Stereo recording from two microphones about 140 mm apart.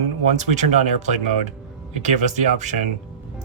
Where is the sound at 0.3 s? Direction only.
55° right (ahead or behind).